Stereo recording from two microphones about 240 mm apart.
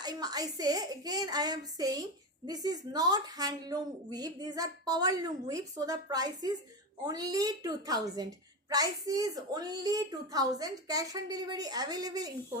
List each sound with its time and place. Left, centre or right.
0.0 s a woman's voice: centre